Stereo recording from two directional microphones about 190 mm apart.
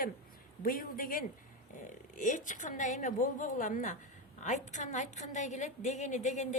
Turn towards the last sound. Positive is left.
turn(degrees=40)  # may be behind; listen again after turning